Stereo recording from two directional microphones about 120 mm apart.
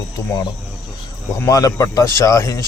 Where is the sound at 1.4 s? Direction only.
30° left (ahead or behind).